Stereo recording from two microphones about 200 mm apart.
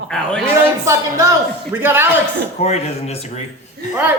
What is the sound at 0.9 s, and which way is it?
Speech, 15° right (ahead or behind).